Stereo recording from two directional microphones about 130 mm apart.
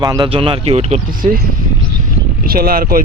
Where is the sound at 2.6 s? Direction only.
90° right.